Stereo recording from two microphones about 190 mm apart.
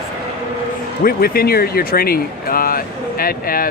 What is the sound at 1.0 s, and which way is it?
Speech, 50° left (ahead or behind).